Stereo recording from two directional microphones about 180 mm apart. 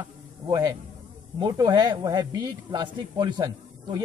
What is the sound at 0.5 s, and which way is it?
A man's voice, 20° right (ahead or behind).